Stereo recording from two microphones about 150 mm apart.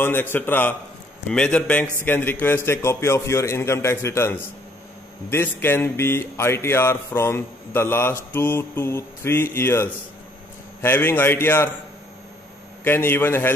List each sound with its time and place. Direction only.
0.0 s speech: 15° left (ahead or behind)
12.8 s speech: 15° left (ahead or behind)